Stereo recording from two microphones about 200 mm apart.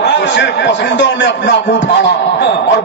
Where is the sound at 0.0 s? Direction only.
60° left (ahead or behind).